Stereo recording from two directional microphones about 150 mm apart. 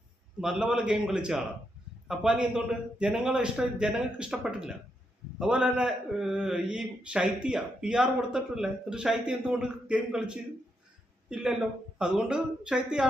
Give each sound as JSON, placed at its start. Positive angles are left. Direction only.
{"t": 0.3, "sound": "a man's voice", "side_deg": -5}